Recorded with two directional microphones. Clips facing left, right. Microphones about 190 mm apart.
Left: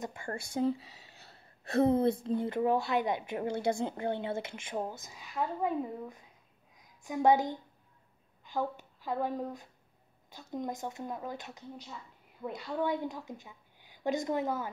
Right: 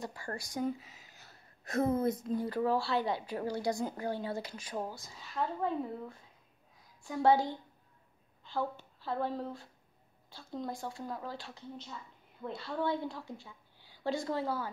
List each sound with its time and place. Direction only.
0.0 s a woman's voice: 20° left (ahead or behind)